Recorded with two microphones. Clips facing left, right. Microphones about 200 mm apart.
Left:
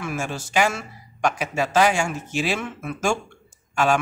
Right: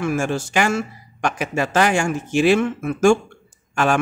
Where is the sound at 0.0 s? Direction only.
50° right (ahead or behind).